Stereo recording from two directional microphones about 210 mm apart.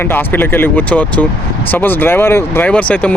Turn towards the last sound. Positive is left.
turn(degrees=5)  # may be behind; listen again after turning